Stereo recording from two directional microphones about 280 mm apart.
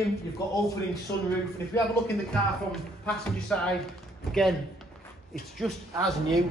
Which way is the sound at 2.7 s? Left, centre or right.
Centre.